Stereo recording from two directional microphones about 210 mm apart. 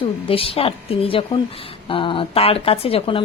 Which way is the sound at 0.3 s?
25° left (ahead or behind).